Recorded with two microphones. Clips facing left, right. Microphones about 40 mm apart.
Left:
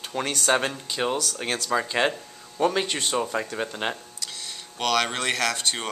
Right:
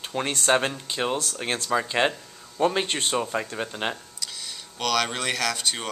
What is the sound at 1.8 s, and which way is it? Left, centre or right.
Speech, centre.